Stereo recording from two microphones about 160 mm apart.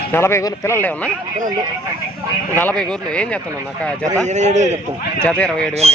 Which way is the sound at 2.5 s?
10° left (ahead or behind).